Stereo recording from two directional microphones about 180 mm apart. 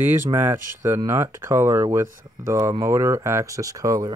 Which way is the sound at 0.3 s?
15° right (ahead or behind).